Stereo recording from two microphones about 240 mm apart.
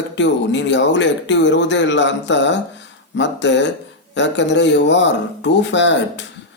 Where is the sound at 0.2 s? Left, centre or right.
Left.